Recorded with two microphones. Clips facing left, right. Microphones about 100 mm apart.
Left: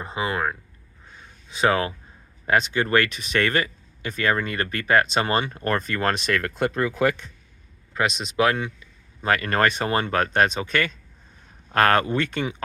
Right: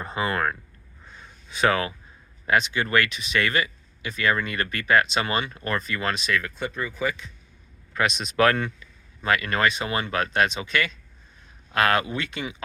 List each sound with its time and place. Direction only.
0.0 s speech: 20° left (ahead or behind)
1.5 s speech: 25° left (ahead or behind); by 6.5 s 55° left (ahead or behind)
6.5 s speech: 75° left (ahead or behind)
7.9 s speech: 30° left (ahead or behind)
8.4 s speech: 15° left (ahead or behind)
8.8 s speech: 35° left (ahead or behind)